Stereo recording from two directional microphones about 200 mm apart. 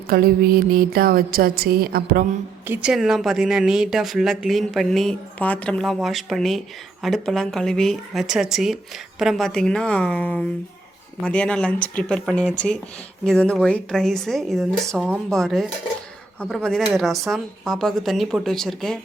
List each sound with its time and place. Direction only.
0.1 s a woman's voice: 50° right (ahead or behind)
2.6 s speech: 5° right (ahead or behind)